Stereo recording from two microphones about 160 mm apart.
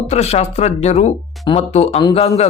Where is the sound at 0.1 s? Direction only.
40° left (ahead or behind).